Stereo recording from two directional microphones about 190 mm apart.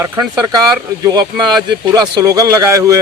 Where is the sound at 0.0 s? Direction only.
20° right (ahead or behind).